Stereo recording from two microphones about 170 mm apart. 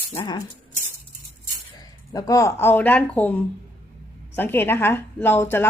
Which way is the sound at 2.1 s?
20° left (ahead or behind).